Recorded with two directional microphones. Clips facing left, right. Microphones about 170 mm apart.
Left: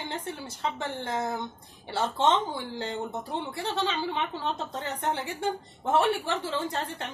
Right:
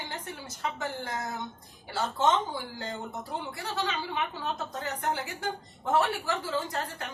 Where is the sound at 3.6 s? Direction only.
25° left (ahead or behind).